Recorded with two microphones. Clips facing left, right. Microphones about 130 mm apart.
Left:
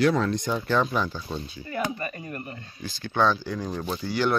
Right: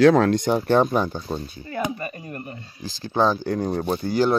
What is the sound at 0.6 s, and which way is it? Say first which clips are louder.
Speech: right 5 dB; 50° right (ahead or behind).